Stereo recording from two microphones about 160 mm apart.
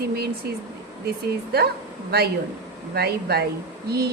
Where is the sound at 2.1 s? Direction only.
80° right.